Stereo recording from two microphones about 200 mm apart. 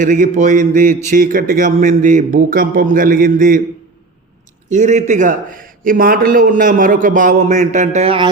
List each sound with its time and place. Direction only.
0.0 s speech: 40° right (ahead or behind)
4.7 s speech: 35° right (ahead or behind)